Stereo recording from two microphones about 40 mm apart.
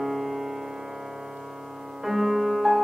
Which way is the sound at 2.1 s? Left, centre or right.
Centre.